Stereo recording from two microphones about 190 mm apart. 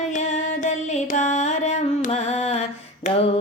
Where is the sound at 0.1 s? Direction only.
40° left (ahead or behind).